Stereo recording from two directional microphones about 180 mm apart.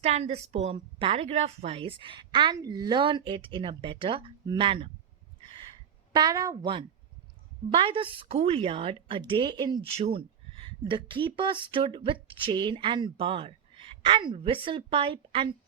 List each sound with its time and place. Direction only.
0.0 s a woman's voice: 35° right (ahead or behind)
6.1 s a woman's voice: 20° right (ahead or behind)